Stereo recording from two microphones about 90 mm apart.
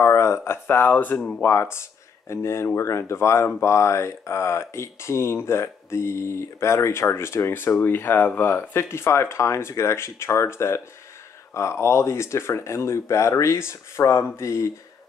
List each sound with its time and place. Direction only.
0.0 s speech: 30° left (ahead or behind)